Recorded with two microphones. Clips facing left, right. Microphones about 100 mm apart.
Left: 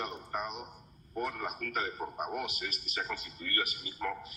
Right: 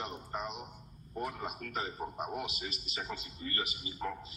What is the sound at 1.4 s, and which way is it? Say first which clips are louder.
A man's voice: left 3 dB; 25° right (ahead or behind).